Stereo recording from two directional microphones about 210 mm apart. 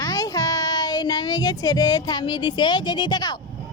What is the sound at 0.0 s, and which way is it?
Child singing, 15° left (ahead or behind).